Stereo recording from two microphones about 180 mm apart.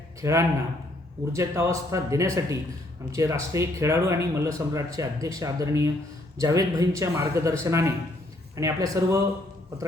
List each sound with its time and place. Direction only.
0.2 s a man's voice: 15° right (ahead or behind)